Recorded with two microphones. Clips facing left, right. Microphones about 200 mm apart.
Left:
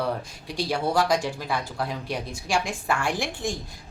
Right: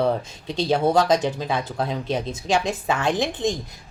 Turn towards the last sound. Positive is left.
turn(degrees=-20)  # may be behind; listen again after turning